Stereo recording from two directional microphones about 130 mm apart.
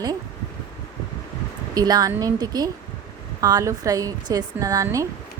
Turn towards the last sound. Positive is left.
turn(degrees=-25)  # may be behind; listen again after turning